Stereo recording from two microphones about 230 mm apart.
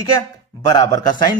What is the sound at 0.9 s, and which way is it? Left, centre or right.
Speech, centre.